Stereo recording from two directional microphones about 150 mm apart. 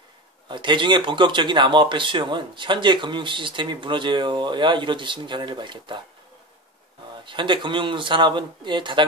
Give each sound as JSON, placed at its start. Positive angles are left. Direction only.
{"t": 0.5, "sound": "speech", "side_deg": -30}
{"t": 7.2, "sound": "speech", "side_deg": -35}